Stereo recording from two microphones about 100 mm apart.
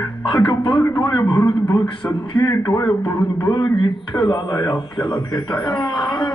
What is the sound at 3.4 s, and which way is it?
Speech, 45° left (ahead or behind).